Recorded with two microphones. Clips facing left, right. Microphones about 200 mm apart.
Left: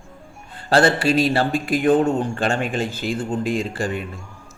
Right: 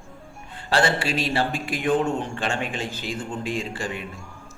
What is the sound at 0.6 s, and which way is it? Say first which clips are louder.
A man's voice: left 5 dB; 40° left (ahead or behind).